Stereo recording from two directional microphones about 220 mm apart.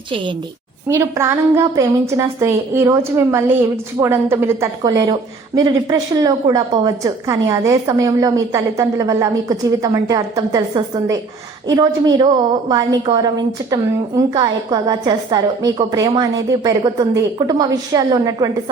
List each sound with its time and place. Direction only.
0.9 s a woman's voice: 10° right (ahead or behind)